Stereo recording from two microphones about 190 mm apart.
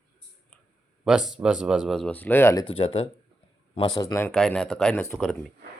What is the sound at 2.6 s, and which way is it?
Speech, 30° left (ahead or behind).